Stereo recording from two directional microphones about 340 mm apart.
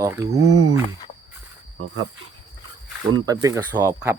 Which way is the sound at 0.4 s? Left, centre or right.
Right.